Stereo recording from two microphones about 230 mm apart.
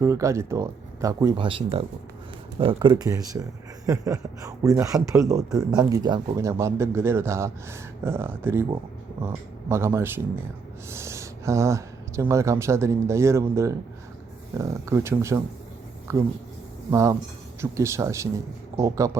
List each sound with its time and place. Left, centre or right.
0.0 s speech: centre